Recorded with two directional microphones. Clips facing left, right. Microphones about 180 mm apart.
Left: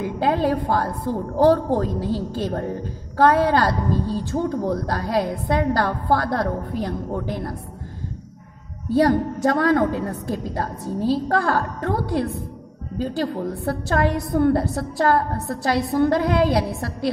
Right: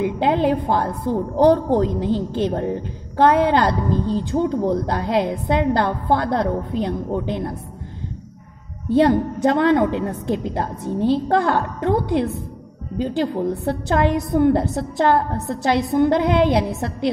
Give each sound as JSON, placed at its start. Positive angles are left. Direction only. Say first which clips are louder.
{"t": 0.0, "sound": "a woman's voice", "louder": "right 2 dB", "side_deg": -20}
{"t": 8.8, "sound": "a woman's voice", "louder": "right 2 dB", "side_deg": -20}